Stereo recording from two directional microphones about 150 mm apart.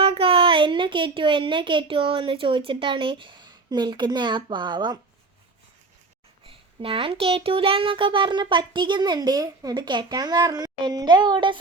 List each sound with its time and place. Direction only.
0.0 s speech: 40° right (ahead or behind)
6.8 s a child's voice: 35° right (ahead or behind)